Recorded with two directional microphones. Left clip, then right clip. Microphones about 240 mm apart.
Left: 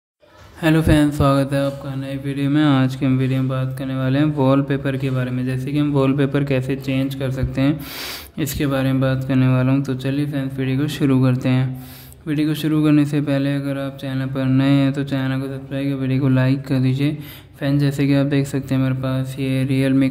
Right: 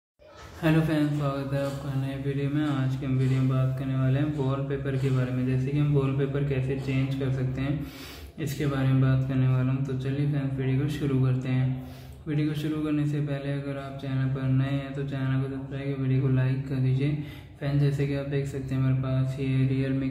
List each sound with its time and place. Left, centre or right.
0.6 s a man's voice: left